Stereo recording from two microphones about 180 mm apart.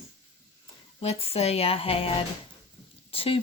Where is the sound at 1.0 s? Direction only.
35° left (ahead or behind).